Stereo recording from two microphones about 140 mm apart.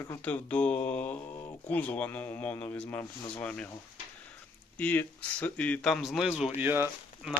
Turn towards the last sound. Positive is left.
turn(degrees=-5)  # may be behind; listen again after turning